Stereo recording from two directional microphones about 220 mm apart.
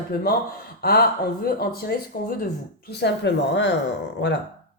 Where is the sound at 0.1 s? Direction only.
45° left (ahead or behind).